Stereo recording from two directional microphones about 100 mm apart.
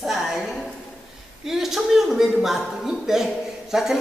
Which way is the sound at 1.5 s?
5° right (ahead or behind).